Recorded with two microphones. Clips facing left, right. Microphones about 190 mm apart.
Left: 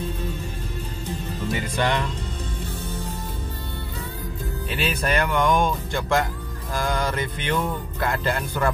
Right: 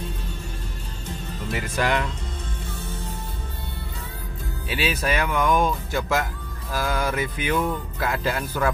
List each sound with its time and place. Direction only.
1.5 s speech: 5° right (ahead or behind)
4.6 s speech: 5° right (ahead or behind)